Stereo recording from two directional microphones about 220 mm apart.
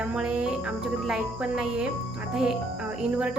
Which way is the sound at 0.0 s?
5° right (ahead or behind).